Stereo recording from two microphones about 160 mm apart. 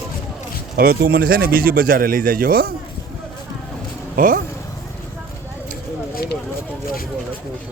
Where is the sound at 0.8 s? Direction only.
70° right (ahead or behind).